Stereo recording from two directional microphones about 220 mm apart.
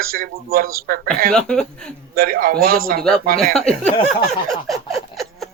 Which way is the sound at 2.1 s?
40° right (ahead or behind).